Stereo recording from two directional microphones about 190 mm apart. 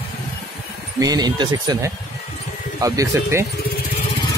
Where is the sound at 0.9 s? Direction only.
20° right (ahead or behind).